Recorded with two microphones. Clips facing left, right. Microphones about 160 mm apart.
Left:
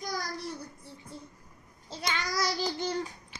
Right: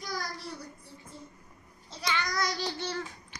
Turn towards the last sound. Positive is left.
turn(degrees=25)  # may be behind; listen again after turning